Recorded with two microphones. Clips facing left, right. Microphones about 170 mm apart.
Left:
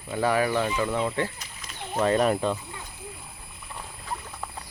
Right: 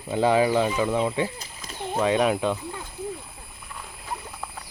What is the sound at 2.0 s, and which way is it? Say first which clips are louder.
Speech: even; centre (ahead or behind).